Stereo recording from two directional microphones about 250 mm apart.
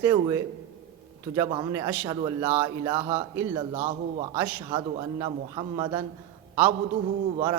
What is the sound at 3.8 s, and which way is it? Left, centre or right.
Speech, right.